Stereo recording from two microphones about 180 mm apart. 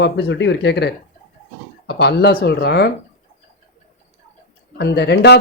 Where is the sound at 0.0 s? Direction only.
80° left.